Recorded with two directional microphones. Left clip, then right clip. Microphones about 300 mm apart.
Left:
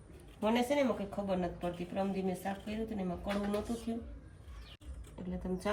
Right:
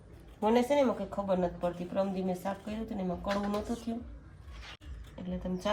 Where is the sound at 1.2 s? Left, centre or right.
Centre.